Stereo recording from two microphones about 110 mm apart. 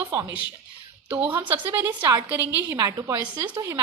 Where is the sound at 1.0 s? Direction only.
15° right (ahead or behind).